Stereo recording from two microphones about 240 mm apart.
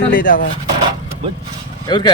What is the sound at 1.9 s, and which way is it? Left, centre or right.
Speech, centre.